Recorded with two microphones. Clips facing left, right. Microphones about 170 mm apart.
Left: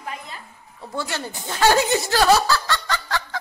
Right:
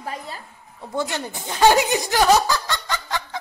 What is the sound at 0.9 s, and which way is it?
Speech, 20° right (ahead or behind).